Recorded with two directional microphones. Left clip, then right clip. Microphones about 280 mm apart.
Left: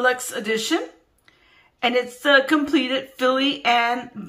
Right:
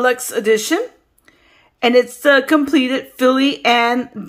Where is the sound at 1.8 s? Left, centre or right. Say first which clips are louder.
Right 8 dB; centre.